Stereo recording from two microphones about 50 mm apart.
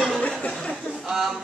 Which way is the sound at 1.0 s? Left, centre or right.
Centre.